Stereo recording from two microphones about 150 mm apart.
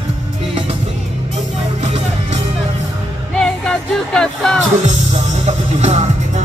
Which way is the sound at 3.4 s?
5° left (ahead or behind).